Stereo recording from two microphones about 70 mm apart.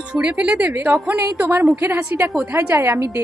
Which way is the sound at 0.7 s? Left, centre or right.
Right.